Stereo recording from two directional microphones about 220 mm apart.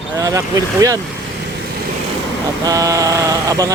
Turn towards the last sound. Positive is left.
turn(degrees=-15)  # may be behind; listen again after turning